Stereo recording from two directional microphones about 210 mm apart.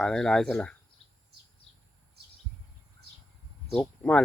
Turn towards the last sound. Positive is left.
turn(degrees=5)  # may be behind; listen again after turning